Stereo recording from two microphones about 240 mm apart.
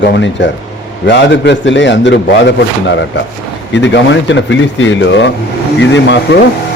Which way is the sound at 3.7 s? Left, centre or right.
Left.